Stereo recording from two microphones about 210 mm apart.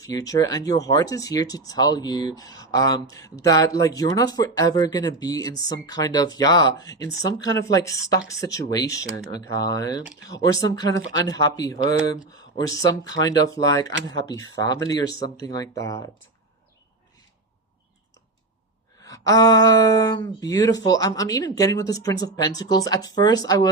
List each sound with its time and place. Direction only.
0.0 s speech: 15° left (ahead or behind)
19.0 s speech: 15° left (ahead or behind)